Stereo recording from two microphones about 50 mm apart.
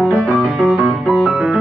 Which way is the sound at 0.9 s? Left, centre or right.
Centre.